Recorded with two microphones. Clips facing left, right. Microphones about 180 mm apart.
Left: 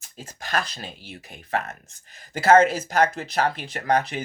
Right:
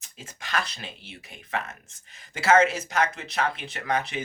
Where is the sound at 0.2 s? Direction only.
40° left (ahead or behind).